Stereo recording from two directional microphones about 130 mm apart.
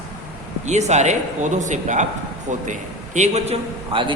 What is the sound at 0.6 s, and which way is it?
A man's voice, 60° right (ahead or behind).